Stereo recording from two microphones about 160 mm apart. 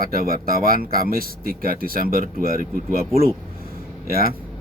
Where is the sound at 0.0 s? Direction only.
65° right (ahead or behind).